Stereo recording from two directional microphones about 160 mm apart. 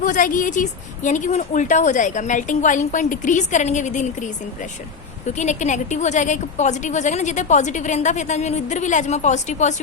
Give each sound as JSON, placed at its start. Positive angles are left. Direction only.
{"t": 0.0, "sound": "a woman's voice", "side_deg": 55}
{"t": 5.4, "sound": "a woman's voice", "side_deg": 50}